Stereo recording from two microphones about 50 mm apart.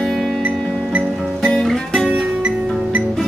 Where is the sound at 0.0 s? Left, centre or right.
Centre.